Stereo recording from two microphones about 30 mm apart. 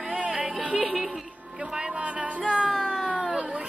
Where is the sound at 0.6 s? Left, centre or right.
Right.